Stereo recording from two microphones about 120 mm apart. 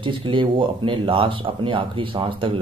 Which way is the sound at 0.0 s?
45° right (ahead or behind).